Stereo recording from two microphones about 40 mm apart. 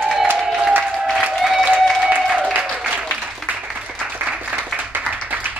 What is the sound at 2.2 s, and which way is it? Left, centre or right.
Applause, centre.